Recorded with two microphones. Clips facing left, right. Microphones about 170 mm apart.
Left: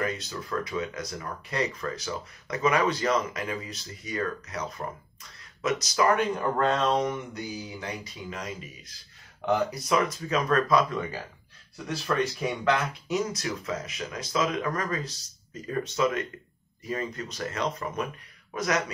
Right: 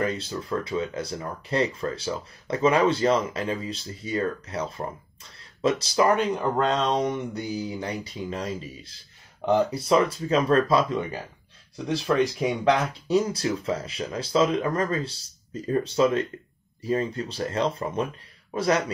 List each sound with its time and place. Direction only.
0.0 s speech: 30° right (ahead or behind)
6.3 s speech: 20° right (ahead or behind)
13.1 s speech: 30° right (ahead or behind)